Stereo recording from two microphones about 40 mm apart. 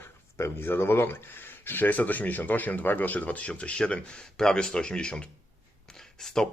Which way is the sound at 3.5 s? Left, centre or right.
Left.